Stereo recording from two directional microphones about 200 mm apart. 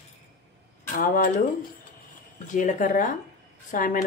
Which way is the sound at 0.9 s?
45° left (ahead or behind).